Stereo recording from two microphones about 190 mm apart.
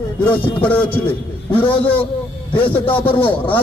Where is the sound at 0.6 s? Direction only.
10° left (ahead or behind).